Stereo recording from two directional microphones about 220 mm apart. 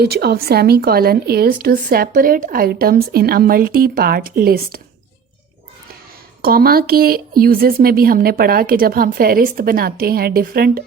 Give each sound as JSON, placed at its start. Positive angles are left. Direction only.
{"t": 0.0, "sound": "a woman's voice", "side_deg": -45}
{"t": 6.4, "sound": "a woman's voice", "side_deg": -40}